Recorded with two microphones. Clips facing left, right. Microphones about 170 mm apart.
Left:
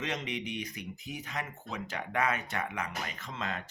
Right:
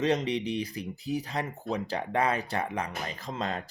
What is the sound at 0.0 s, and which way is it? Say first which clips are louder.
Speech: right 9 dB; 35° right (ahead or behind).